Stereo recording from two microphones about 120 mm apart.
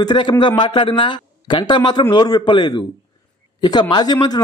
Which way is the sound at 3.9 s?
35° left (ahead or behind).